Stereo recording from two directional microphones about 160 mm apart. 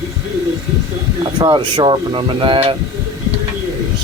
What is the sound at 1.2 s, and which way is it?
Speech, 30° right (ahead or behind).